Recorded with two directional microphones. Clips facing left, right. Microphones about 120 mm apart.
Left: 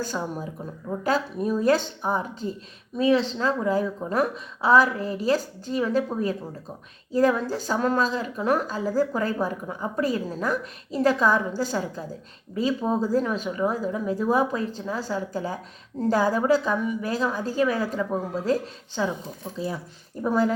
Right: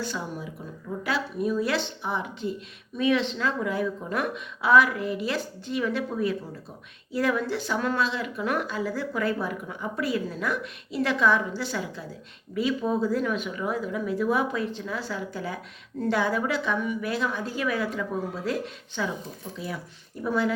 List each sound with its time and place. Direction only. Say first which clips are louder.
0.0 s a woman's voice: left 3 dB; 45° left (ahead or behind)